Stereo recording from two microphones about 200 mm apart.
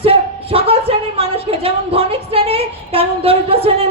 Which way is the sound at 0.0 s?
30° right (ahead or behind).